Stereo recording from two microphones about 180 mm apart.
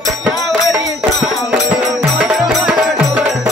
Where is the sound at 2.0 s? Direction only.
5° right (ahead or behind).